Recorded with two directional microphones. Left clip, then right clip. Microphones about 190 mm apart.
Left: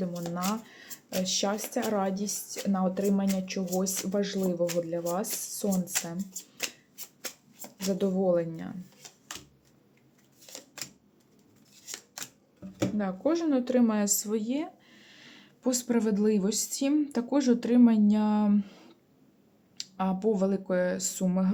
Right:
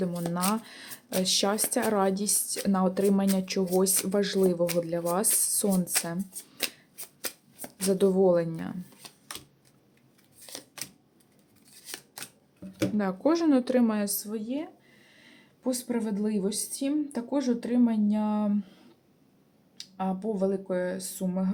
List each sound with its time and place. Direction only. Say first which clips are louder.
0.0 s a woman's voice: right 3 dB; 15° right (ahead or behind)
7.8 s a woman's voice: right 6 dB; 20° right (ahead or behind)
13.0 s a woman's voice: right 3 dB; 15° right (ahead or behind)
14.0 s speech: left 4 dB; 15° left (ahead or behind)
19.7 s speech: left 1 dB; 25° left (ahead or behind)